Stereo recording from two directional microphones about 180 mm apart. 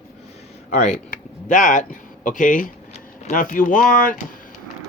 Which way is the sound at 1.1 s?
45° left (ahead or behind).